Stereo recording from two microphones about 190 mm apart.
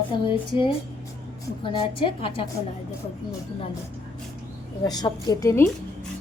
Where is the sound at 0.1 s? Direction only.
25° left (ahead or behind).